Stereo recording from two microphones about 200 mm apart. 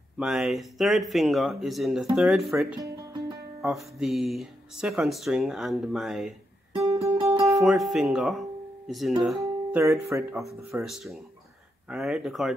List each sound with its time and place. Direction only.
0.2 s speech: centre (ahead or behind)
2.8 s music: 20° right (ahead or behind)
3.6 s speech: centre (ahead or behind)
6.7 s music: 25° right (ahead or behind)
7.4 s speech: centre (ahead or behind)
9.4 s speech: 15° right (ahead or behind)
10.7 s speech: centre (ahead or behind)